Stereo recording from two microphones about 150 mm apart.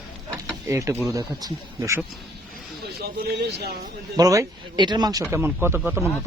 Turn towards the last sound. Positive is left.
turn(degrees=-15)  # may be behind; listen again after turning